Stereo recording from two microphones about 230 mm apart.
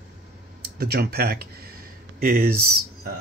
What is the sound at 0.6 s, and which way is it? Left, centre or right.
Speech, right.